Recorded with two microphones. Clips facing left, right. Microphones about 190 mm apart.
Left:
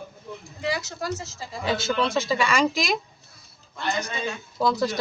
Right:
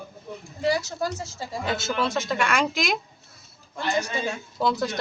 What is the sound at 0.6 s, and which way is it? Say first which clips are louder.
Speech: right 4 dB; 35° right (ahead or behind).